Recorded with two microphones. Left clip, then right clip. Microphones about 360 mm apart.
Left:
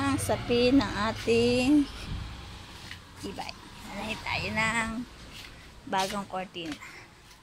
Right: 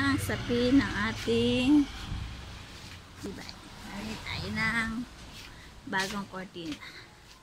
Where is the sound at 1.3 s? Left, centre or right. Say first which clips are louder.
Left 4 dB; centre.